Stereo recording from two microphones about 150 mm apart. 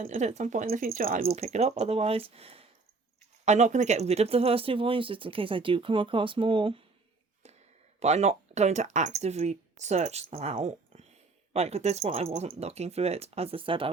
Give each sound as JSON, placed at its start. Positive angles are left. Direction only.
{"t": 0.0, "sound": "speech", "side_deg": -55}
{"t": 1.4, "sound": "speech", "side_deg": -45}
{"t": 7.9, "sound": "speech", "side_deg": -45}